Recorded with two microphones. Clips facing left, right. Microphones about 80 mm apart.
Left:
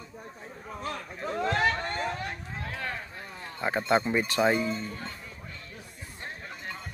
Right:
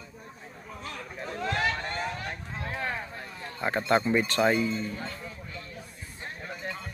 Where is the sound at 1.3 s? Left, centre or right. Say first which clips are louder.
Left 3 dB; left.